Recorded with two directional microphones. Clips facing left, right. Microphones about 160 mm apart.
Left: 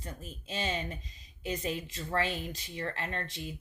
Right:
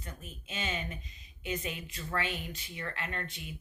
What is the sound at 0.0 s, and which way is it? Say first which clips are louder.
A woman's voice: left 3 dB; 35° left (ahead or behind).